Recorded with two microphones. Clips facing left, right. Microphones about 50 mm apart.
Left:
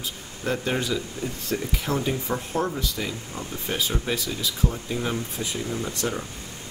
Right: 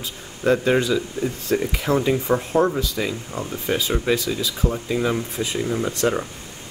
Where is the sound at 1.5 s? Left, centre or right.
Right.